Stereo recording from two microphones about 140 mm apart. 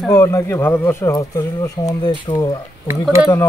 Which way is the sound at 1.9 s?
35° left (ahead or behind).